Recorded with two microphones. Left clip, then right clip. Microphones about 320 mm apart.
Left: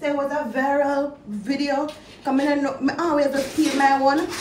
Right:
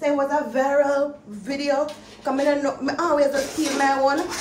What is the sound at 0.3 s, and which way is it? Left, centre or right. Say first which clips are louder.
A woman's voice: right 1 dB; centre.